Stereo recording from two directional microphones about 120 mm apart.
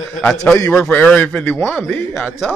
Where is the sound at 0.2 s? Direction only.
10° left (ahead or behind).